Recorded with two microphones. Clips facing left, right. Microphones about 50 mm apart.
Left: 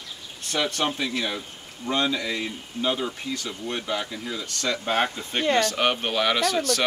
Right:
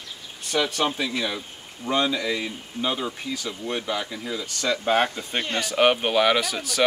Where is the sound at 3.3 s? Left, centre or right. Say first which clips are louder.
Right 1 dB; centre.